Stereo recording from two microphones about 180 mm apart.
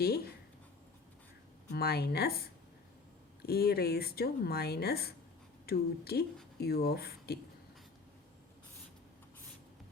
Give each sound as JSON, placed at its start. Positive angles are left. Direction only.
{"t": 1.7, "sound": "speech", "side_deg": 60}
{"t": 3.4, "sound": "speech", "side_deg": 60}